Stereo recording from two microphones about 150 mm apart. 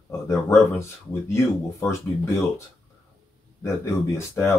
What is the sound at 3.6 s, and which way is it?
Speech, 20° left (ahead or behind).